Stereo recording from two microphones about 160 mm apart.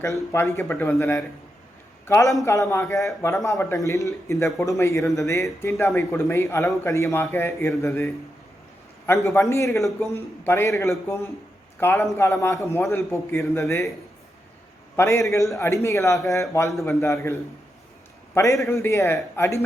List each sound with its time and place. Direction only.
0.0 s a man's voice: 20° left (ahead or behind)
9.2 s a man's voice: 15° left (ahead or behind)
14.9 s a man's voice: 15° left (ahead or behind)
18.6 s a man's voice: 15° left (ahead or behind)